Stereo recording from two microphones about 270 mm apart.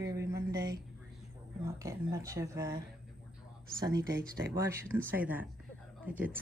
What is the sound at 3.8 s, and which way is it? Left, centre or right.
Speech, centre.